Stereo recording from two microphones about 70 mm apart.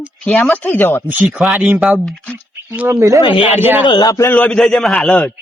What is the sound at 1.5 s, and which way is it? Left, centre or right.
Speech, right.